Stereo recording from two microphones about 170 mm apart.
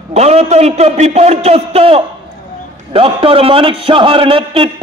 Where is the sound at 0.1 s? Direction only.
40° right (ahead or behind).